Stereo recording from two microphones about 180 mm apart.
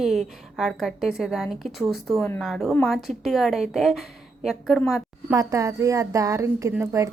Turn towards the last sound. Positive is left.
turn(degrees=-15)  # may be behind; listen again after turning